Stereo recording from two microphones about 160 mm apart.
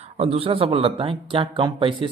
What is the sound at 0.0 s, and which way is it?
Speech, 40° right (ahead or behind).